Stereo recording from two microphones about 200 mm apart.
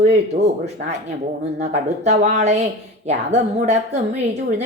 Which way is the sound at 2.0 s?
35° right (ahead or behind).